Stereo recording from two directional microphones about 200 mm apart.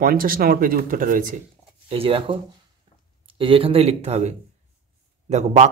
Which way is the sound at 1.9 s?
25° right (ahead or behind).